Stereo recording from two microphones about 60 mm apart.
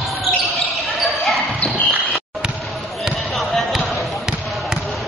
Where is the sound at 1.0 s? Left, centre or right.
Centre.